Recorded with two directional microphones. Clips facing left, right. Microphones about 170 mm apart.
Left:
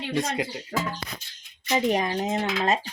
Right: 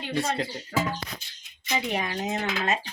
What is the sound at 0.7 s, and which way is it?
Speech, 35° left (ahead or behind).